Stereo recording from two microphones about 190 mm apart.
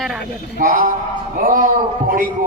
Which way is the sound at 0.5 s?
45° right (ahead or behind).